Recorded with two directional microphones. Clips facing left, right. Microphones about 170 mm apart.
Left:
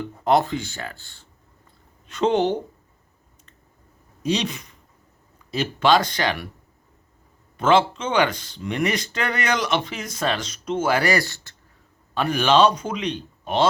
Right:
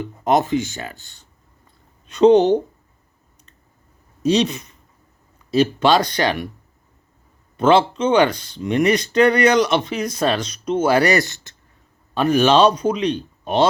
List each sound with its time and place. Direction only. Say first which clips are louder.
0.0 s speech: right 1 dB; 20° right (ahead or behind)
4.4 s speech: right 8 dB; 20° right (ahead or behind)
7.5 s speech: right 3 dB; 20° right (ahead or behind)
8.3 s speech: right 3 dB; 20° left (ahead or behind)
8.5 s speech: right 8 dB; 20° right (ahead or behind)